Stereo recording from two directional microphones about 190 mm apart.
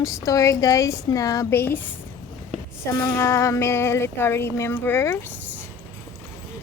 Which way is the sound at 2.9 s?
15° left (ahead or behind).